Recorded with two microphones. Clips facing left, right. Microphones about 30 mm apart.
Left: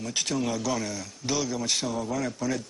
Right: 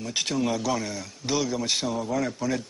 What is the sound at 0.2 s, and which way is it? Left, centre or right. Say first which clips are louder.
A man's voice: right 2 dB; centre.